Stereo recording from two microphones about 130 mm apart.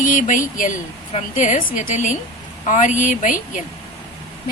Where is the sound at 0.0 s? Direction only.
85° left.